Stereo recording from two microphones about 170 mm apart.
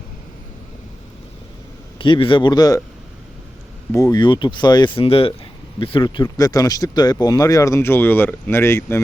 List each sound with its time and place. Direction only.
2.0 s speech: 30° left (ahead or behind)
3.9 s speech: 20° left (ahead or behind)